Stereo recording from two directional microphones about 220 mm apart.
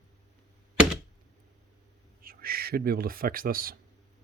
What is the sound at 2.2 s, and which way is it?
Speech, 40° right (ahead or behind).